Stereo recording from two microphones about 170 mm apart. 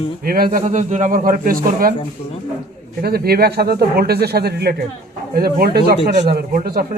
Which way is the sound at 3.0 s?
65° right (ahead or behind).